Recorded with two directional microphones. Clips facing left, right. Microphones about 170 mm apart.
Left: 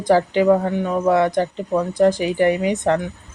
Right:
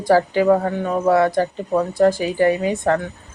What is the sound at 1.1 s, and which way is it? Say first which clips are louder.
A woman's voice: right 1 dB; 20° left (ahead or behind).